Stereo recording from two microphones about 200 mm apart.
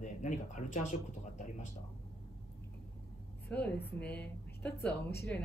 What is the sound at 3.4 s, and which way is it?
A woman's voice, 5° left (ahead or behind).